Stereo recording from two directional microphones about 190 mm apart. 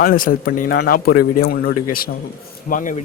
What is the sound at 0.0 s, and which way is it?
Speech, 50° left (ahead or behind).